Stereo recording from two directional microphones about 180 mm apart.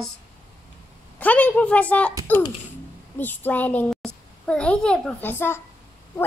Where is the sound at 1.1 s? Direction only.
10° left (ahead or behind).